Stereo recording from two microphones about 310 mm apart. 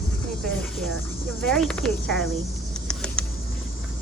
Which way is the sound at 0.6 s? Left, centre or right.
Centre.